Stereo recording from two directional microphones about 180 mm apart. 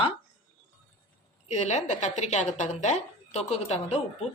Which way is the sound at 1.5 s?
40° left (ahead or behind).